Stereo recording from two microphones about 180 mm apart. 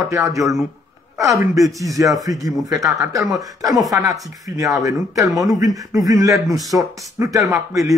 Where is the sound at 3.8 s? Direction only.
20° right (ahead or behind).